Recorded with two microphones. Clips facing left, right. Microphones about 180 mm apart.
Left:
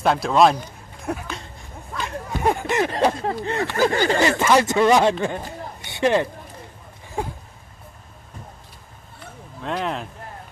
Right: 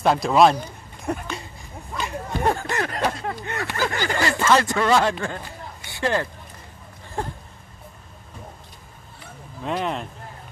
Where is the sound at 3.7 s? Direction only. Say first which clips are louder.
Left 6 dB; 20° left (ahead or behind).